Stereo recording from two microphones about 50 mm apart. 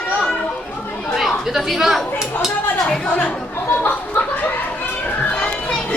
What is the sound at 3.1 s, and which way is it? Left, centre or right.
Speech, left.